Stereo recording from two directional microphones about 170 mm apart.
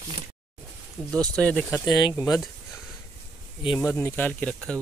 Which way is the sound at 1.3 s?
5° left (ahead or behind).